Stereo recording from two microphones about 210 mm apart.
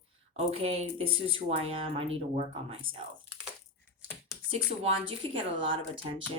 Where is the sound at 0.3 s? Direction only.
30° right (ahead or behind).